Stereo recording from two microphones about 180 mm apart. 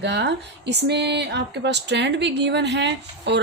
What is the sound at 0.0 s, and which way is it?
A woman's voice, 75° right (ahead or behind).